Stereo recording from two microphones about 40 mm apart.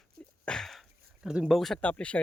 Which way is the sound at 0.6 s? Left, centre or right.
Centre.